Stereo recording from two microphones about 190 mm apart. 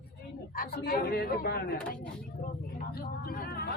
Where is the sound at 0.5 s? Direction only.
55° left (ahead or behind).